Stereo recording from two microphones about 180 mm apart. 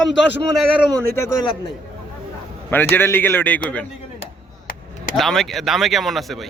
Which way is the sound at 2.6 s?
10° left (ahead or behind).